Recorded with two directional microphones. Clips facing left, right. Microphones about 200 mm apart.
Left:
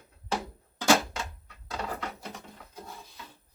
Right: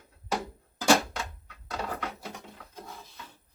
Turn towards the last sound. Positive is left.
turn(degrees=0)  # may be behind; listen again after turning